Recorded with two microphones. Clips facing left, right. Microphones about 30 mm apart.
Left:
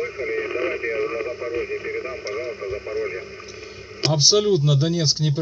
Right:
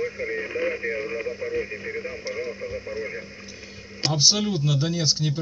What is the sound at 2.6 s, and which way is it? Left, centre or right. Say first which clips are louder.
Speech: left 4 dB; left.